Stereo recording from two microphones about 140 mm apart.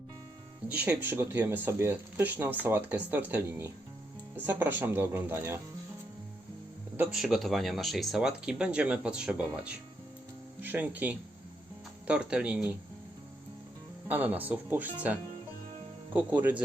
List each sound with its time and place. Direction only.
0.7 s speech: 10° right (ahead or behind)
6.9 s speech: 10° right (ahead or behind)
14.1 s speech: 10° right (ahead or behind)